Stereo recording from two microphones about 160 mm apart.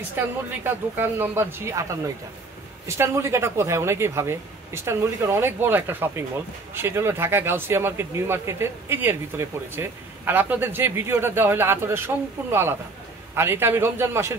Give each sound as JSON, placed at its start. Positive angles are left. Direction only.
{"t": 0.7, "sound": "speech", "side_deg": -15}